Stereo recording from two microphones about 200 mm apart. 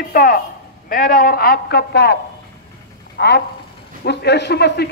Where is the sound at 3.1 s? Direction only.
55° left (ahead or behind).